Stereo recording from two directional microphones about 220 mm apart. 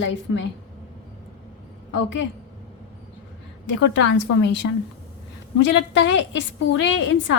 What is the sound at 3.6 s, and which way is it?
A woman's voice, 55° left (ahead or behind).